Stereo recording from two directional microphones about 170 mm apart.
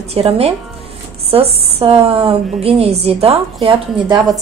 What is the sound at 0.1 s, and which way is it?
A woman's voice, 35° right (ahead or behind).